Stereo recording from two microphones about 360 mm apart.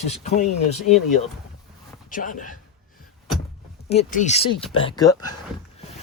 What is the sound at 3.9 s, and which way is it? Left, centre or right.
Speech, centre.